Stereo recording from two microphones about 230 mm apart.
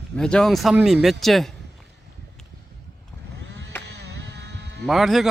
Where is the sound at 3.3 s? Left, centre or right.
Right.